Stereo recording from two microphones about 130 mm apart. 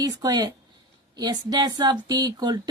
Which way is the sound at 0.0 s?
30° right (ahead or behind).